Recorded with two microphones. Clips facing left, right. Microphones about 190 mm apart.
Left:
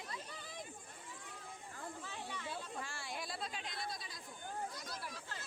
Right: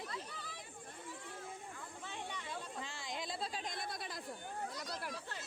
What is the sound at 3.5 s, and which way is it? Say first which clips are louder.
Speech: right 2 dB; 45° right (ahead or behind).